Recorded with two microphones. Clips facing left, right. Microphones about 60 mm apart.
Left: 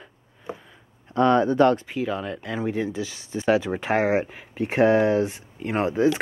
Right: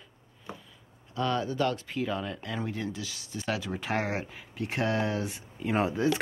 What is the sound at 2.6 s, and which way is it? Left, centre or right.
Speech, centre.